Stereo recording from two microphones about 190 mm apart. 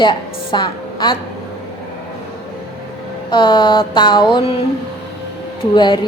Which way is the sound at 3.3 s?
25° left (ahead or behind).